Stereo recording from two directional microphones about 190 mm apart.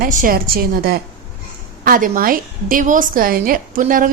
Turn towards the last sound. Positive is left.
turn(degrees=-45)  # may be behind; listen again after turning